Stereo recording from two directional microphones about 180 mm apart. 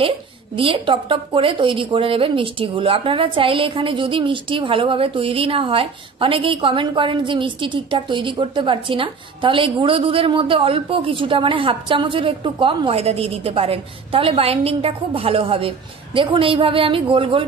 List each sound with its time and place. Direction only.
0.6 s a woman's voice: 30° right (ahead or behind)